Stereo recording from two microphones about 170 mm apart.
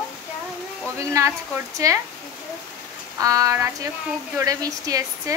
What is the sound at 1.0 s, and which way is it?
Speech, 15° right (ahead or behind).